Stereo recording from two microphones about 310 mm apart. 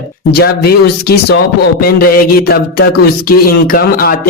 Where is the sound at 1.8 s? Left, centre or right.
Left.